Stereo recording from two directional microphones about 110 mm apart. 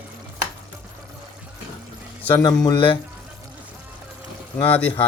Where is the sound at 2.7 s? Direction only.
55° left (ahead or behind).